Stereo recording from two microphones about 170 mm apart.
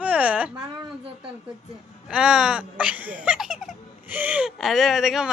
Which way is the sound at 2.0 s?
5° right (ahead or behind).